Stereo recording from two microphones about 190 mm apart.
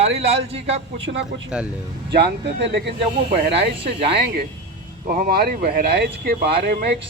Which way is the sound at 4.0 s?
60° right (ahead or behind).